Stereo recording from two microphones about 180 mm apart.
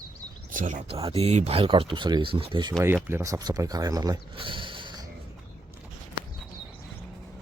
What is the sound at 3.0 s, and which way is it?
Speech, 15° right (ahead or behind).